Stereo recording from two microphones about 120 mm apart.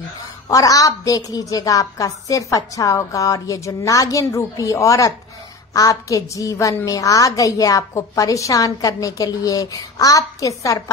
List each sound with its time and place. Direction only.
0.5 s a woman's voice: 30° left (ahead or behind)